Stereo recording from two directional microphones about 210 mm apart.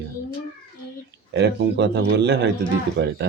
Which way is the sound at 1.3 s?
55° right (ahead or behind).